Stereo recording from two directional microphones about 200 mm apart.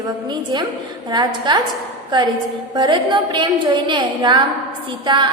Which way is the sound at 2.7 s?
20° right (ahead or behind).